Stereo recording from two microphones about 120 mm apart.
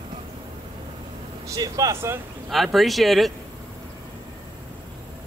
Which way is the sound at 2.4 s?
Centre (ahead or behind).